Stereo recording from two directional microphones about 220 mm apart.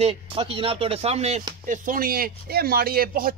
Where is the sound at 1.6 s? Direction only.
40° right (ahead or behind).